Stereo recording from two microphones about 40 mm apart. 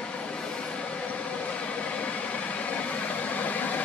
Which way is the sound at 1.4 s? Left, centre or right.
Left.